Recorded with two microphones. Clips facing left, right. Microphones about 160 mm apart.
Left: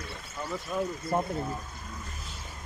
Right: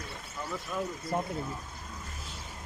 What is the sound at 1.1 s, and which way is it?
Speech, 50° left (ahead or behind).